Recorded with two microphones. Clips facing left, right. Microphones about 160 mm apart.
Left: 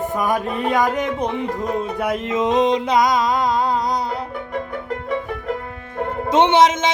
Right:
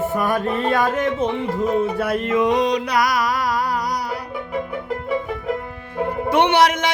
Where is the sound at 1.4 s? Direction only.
15° left (ahead or behind).